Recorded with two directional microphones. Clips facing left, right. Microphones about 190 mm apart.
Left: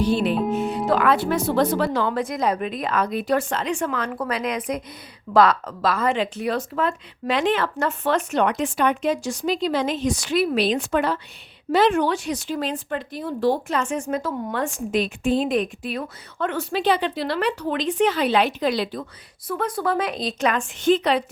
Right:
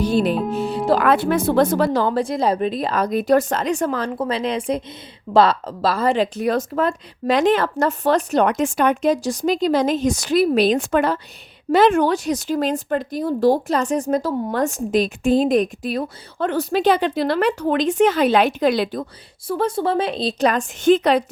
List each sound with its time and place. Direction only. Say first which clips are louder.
0.0 s speech: right 2 dB; 40° right (ahead or behind)
0.5 s music: right 1 dB; 35° right (ahead or behind)
1.0 s speech: right 3 dB; 55° right (ahead or behind)
19.5 s speech: right 4 dB; 30° right (ahead or behind); by 21.2 s 45° right (ahead or behind)